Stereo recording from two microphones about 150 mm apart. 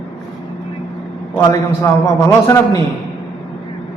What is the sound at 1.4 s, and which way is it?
Speech, 25° left (ahead or behind).